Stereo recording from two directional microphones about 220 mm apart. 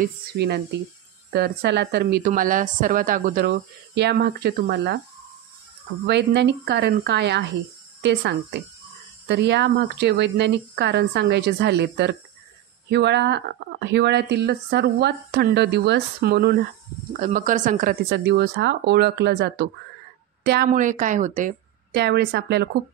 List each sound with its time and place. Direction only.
0.0 s a woman's voice: 50° right (ahead or behind)
6.0 s a woman's voice: 50° right (ahead or behind)